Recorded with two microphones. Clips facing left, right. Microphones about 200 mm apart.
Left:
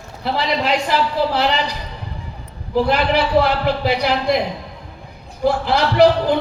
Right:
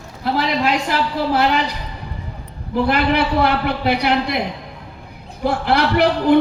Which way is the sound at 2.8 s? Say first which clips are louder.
Right 2 dB; 60° right (ahead or behind).